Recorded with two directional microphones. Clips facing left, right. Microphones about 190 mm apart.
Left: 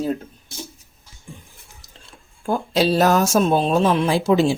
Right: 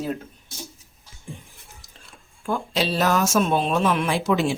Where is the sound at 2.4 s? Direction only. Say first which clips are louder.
Left 5 dB; 35° left (ahead or behind).